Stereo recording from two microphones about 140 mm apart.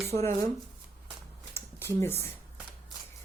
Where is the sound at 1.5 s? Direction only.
15° left (ahead or behind).